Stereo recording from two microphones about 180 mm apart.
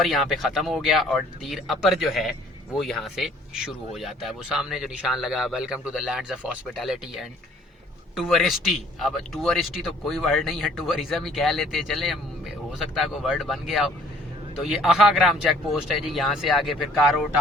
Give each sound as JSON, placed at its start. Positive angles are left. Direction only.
{"t": 0.0, "sound": "speech", "side_deg": 0}
{"t": 8.1, "sound": "speech", "side_deg": 0}